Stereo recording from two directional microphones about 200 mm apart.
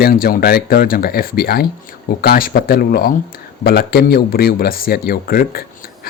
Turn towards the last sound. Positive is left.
turn(degrees=50)  # may be behind; listen again after turning